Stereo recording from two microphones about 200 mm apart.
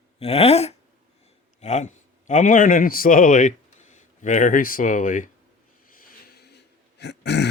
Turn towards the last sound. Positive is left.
turn(degrees=60)  # may be behind; listen again after turning